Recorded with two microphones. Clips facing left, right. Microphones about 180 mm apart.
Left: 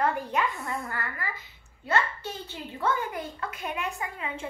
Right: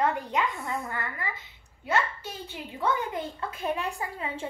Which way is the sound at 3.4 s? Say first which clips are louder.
Right 5 dB; 30° right (ahead or behind).